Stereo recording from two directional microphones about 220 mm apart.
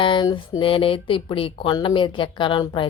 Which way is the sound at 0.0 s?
20° left (ahead or behind).